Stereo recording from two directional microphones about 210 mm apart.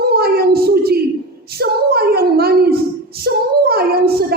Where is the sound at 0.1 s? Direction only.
45° right (ahead or behind).